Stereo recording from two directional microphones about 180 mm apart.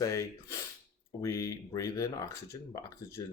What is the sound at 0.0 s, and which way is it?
Speech, 15° left (ahead or behind).